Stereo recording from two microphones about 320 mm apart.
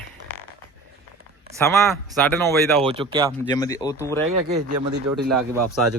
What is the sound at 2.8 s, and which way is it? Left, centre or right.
Speech, centre.